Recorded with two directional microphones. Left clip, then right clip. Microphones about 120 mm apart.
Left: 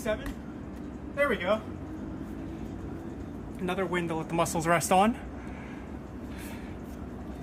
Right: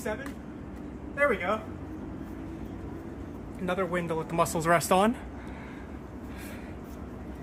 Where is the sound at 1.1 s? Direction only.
20° left (ahead or behind).